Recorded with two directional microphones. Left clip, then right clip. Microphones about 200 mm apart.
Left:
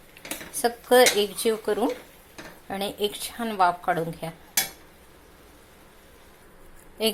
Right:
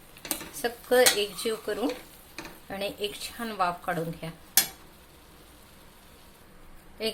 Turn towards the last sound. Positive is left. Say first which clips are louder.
# left 6 dB
turn(degrees=20)  # may be behind; listen again after turning